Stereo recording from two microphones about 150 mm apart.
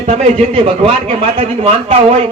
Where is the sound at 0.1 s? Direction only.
40° right (ahead or behind).